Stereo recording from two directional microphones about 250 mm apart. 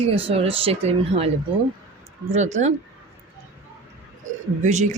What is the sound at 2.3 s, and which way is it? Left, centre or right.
Speech, right.